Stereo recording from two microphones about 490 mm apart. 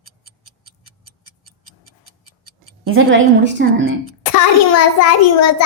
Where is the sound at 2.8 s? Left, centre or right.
Right.